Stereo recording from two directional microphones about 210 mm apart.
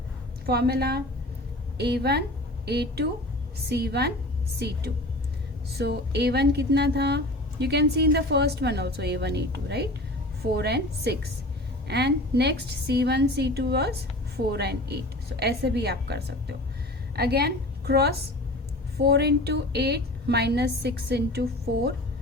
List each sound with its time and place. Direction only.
0.4 s a woman's voice: 50° right (ahead or behind)